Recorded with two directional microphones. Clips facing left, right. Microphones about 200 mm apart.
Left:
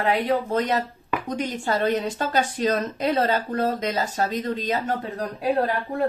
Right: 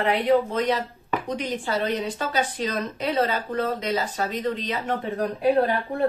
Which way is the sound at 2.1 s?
45° left (ahead or behind).